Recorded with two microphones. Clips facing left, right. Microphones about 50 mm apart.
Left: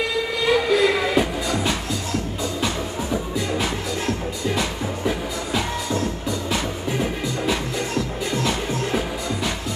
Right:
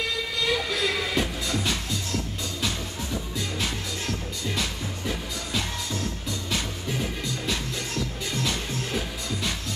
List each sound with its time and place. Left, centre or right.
0.4 s music: centre